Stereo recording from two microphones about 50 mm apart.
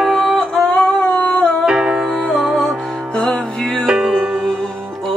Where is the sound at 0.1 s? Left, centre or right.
Centre.